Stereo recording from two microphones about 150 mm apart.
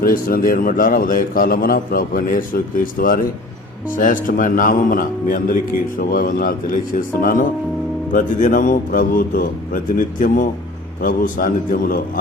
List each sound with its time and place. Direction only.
0.0 s a man's voice: 75° left (ahead or behind)